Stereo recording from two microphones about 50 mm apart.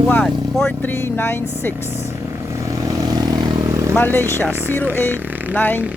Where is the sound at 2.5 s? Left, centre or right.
Right.